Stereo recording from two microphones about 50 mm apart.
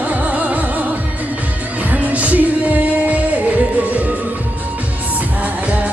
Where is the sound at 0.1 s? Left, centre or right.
Right.